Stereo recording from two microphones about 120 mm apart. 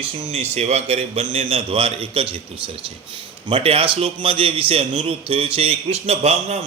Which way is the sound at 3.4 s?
50° right (ahead or behind).